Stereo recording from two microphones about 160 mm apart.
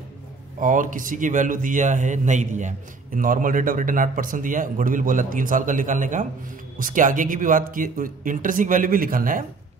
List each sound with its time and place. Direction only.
0.6 s a man's voice: 55° right (ahead or behind)